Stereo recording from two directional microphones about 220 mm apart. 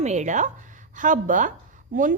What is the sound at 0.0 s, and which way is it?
A woman's voice, 30° right (ahead or behind).